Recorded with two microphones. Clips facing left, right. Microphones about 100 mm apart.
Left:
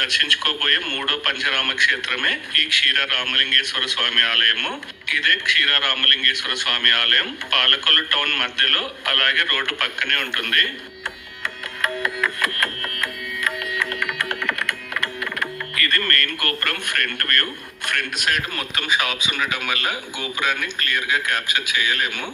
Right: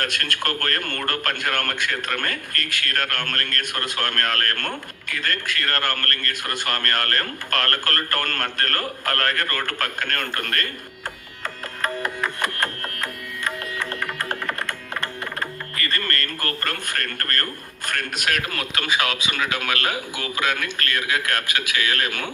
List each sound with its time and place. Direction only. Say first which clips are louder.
0.0 s a man's voice: left 1 dB; 45° right (ahead or behind)
11.4 s music: left 1 dB; 35° right (ahead or behind)
16.0 s a man's voice: left 2 dB; 30° right (ahead or behind); by 18.4 s 45° right (ahead or behind)
18.5 s a man's voice: even; 20° left (ahead or behind)
19.1 s a man's voice: even; 30° right (ahead or behind)
19.6 s a man's voice: right 1 dB; 20° left (ahead or behind)